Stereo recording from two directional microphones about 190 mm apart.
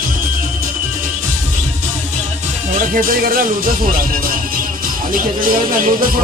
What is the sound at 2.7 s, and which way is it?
Speech, 45° right (ahead or behind).